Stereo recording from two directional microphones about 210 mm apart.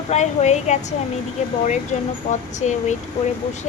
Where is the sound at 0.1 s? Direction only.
35° left (ahead or behind).